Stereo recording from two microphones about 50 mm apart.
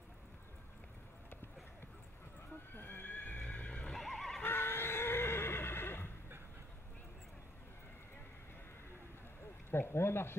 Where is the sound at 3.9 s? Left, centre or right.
Centre.